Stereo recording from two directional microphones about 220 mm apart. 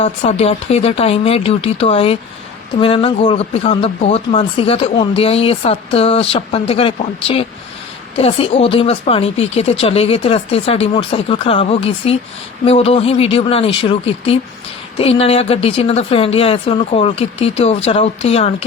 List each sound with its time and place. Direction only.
0.0 s speech: 25° left (ahead or behind)